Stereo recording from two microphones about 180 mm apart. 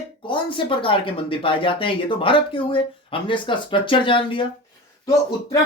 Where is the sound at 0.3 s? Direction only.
30° left (ahead or behind).